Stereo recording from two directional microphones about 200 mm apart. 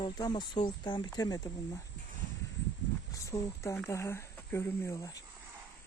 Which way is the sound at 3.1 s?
15° left (ahead or behind).